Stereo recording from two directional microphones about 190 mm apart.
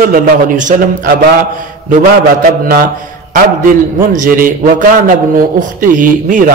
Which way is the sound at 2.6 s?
50° right (ahead or behind).